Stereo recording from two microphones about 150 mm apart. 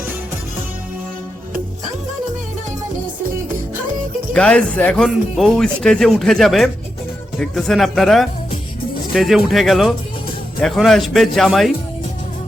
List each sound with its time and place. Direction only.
4.4 s speech: 5° left (ahead or behind)